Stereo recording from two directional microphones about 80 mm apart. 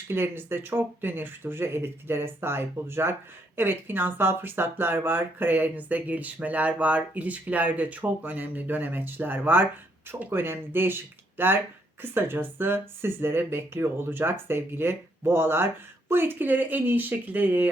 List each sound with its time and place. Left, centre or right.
0.1 s speech: right